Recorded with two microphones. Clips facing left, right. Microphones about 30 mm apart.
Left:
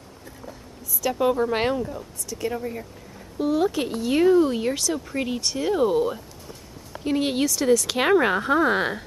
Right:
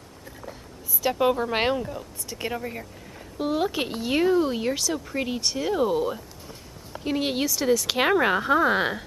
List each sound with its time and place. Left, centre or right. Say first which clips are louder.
1.1 s speech: left 2 dB; centre
2.2 s speech: left 3 dB; right
4.2 s speech: left 4 dB; centre